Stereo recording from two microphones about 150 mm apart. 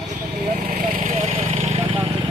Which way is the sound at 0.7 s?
60° right (ahead or behind).